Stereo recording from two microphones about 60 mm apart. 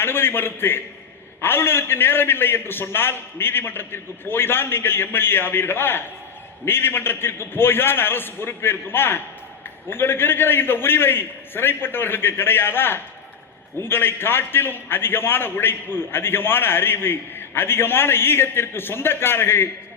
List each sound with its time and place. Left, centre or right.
0.0 s a man's voice: left